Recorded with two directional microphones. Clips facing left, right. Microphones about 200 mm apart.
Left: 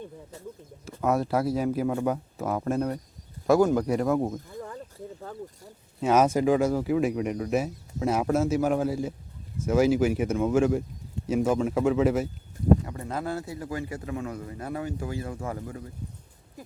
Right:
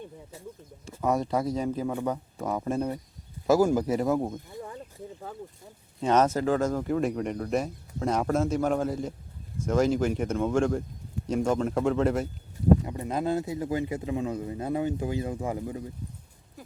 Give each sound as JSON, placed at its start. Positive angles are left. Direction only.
{"t": 0.9, "sound": "speech", "side_deg": 5}
{"t": 6.0, "sound": "speech", "side_deg": 10}
{"t": 12.8, "sound": "a man's voice", "side_deg": -20}